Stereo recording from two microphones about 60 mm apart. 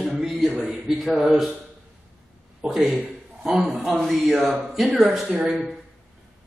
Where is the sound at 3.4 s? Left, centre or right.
Centre.